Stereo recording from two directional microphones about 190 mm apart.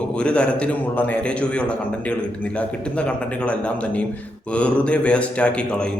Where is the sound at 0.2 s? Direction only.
5° left (ahead or behind).